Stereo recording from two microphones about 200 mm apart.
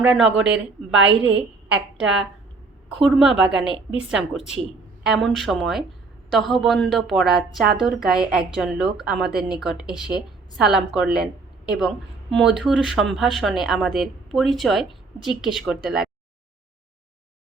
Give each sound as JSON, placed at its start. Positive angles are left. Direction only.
{"t": 0.1, "sound": "a woman's voice", "side_deg": -5}
{"t": 0.9, "sound": "a woman's voice", "side_deg": -65}
{"t": 1.4, "sound": "a woman's voice", "side_deg": -5}